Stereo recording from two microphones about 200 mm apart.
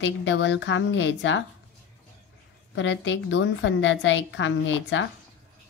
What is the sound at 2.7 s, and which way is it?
A woman's voice, 65° left (ahead or behind).